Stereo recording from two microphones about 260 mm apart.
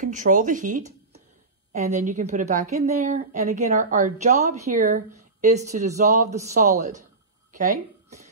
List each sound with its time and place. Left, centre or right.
0.0 s a woman's voice: right